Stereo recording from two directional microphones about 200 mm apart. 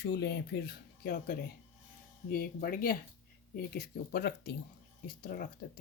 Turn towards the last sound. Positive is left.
turn(degrees=50)  # may be behind; listen again after turning